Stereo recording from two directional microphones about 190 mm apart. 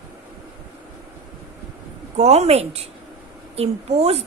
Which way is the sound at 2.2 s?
35° right (ahead or behind).